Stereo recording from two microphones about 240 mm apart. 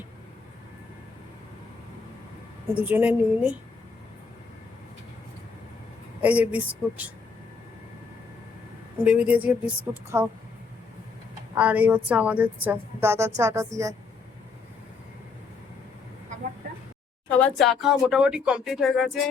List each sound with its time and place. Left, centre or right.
2.7 s speech: centre
6.2 s a woman's voice: centre
9.0 s a woman's voice: centre
11.5 s a woman's voice: centre
17.4 s speech: centre